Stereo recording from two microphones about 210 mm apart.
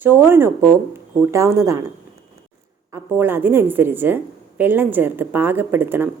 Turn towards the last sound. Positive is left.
turn(degrees=-10)  # may be behind; listen again after turning